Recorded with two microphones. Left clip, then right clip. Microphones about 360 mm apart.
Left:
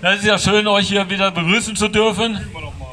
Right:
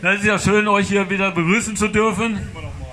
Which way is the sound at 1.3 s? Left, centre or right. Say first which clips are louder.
Left 2 dB; left.